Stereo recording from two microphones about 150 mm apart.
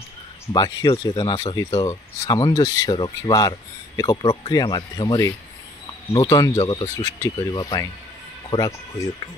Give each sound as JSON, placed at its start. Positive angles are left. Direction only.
{"t": 0.5, "sound": "speech", "side_deg": 25}